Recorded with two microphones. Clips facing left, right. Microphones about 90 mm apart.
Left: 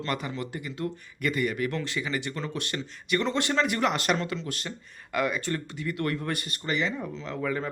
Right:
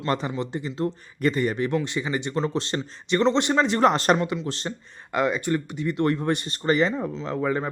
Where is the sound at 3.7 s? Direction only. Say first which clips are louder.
Right 7 dB; 35° right (ahead or behind).